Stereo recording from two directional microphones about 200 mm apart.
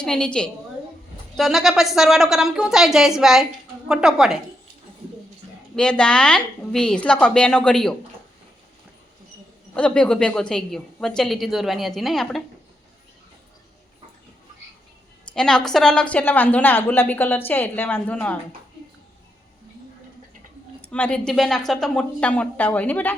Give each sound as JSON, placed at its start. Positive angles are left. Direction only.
{"t": 0.0, "sound": "a woman's voice", "side_deg": 5}
{"t": 5.7, "sound": "a woman's voice", "side_deg": 5}
{"t": 9.7, "sound": "a woman's voice", "side_deg": 5}
{"t": 15.4, "sound": "speech", "side_deg": 5}
{"t": 20.8, "sound": "speech", "side_deg": 5}